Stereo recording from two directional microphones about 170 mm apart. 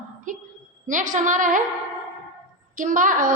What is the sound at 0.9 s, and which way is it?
Speech, 50° right (ahead or behind).